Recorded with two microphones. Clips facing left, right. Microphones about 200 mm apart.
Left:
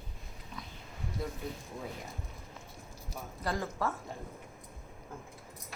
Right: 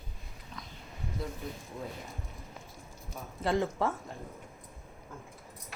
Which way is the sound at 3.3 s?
25° right (ahead or behind).